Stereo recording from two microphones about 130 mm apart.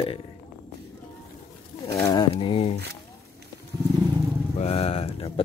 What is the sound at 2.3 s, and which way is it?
Speech, 45° left (ahead or behind).